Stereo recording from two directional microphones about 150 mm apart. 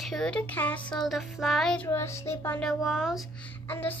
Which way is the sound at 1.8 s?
15° left (ahead or behind).